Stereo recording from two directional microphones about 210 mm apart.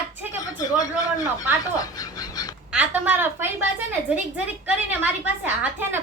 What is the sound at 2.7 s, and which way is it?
A woman's voice, 5° right (ahead or behind).